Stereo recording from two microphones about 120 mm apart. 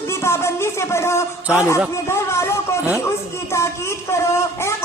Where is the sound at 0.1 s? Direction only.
20° left (ahead or behind).